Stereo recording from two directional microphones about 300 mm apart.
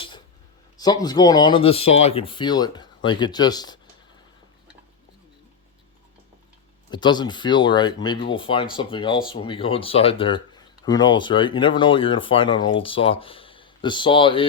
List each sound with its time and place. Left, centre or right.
0.8 s speech: centre
6.9 s speech: centre